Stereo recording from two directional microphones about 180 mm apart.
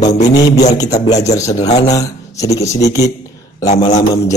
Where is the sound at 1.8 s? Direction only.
20° left (ahead or behind).